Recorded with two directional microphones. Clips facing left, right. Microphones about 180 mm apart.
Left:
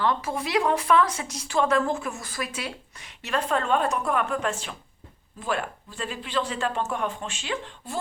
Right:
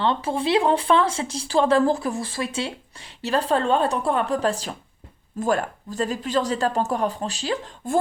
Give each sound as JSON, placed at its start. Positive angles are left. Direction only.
{"t": 0.0, "sound": "speech", "side_deg": -30}